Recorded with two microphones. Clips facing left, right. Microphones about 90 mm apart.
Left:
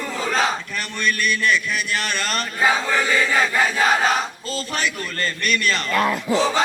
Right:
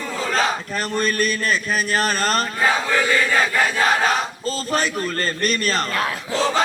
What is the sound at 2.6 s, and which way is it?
Chant, 10° left (ahead or behind).